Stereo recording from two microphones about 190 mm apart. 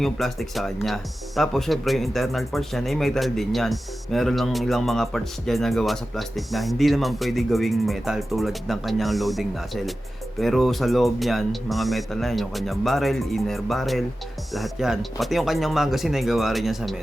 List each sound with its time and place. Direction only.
0.0 s speech: centre (ahead or behind)